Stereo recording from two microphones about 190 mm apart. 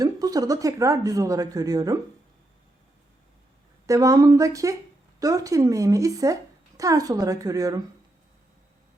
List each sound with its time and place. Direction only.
0.0 s speech: 20° right (ahead or behind)
3.8 s a woman's voice: 15° right (ahead or behind)